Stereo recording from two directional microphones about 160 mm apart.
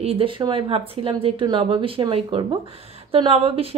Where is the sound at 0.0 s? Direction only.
35° right (ahead or behind).